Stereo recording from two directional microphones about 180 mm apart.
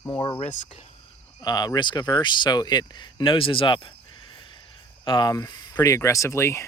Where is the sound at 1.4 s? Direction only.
20° left (ahead or behind).